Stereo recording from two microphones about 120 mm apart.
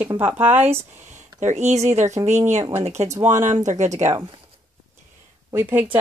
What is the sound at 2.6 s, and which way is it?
Speech, 60° right (ahead or behind).